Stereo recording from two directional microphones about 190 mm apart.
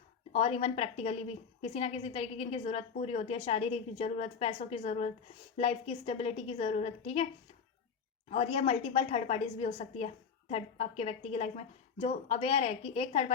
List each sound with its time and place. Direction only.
0.3 s a woman's voice: 30° left (ahead or behind)
8.3 s a woman's voice: 30° left (ahead or behind)